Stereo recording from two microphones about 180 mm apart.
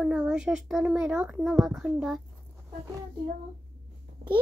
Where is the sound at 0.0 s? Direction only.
5° right (ahead or behind).